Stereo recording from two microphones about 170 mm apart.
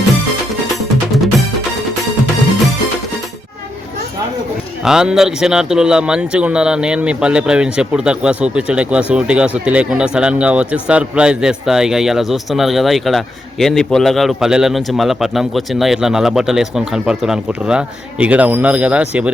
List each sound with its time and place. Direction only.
0.8 s music: centre (ahead or behind)
4.8 s speech: 5° right (ahead or behind)